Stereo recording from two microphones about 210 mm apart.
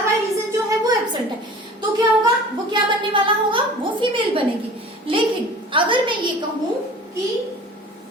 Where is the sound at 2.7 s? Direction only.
25° right (ahead or behind).